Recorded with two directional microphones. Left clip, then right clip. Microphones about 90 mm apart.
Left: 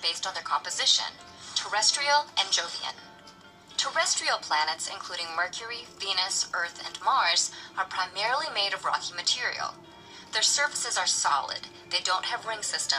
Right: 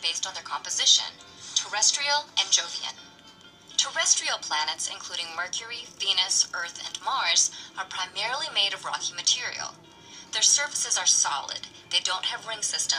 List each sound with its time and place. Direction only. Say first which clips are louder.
0.0 s a woman's voice: even; 35° left (ahead or behind)